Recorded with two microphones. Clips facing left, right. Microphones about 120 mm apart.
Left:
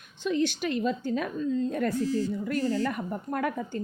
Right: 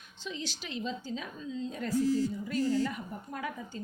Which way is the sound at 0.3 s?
60° left (ahead or behind).